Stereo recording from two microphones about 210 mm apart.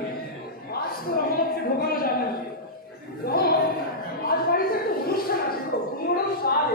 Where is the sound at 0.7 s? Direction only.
45° left (ahead or behind).